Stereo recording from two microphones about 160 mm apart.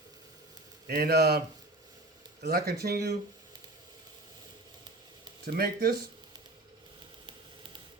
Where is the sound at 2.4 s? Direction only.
75° right (ahead or behind).